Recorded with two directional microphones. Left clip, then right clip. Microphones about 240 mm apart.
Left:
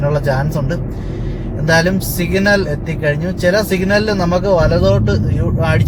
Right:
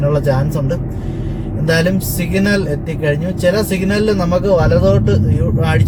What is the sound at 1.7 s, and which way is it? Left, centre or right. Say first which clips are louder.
Speech: left 2 dB; centre.